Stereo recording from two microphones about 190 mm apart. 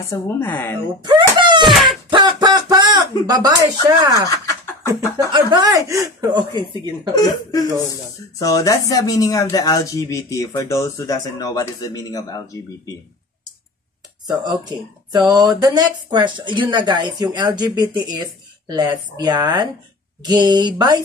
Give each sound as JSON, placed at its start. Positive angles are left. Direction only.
{"t": 0.1, "sound": "speech", "side_deg": 10}
{"t": 1.0, "sound": "wail", "side_deg": -25}
{"t": 1.6, "sound": "wail", "side_deg": 0}
{"t": 2.0, "sound": "a sound", "side_deg": -25}
{"t": 4.0, "sound": "speech", "side_deg": -20}
{"t": 4.3, "sound": "a sound", "side_deg": 15}
{"t": 5.2, "sound": "speech", "side_deg": -20}
{"t": 7.2, "sound": "speech", "side_deg": 20}
{"t": 14.2, "sound": "speech", "side_deg": -20}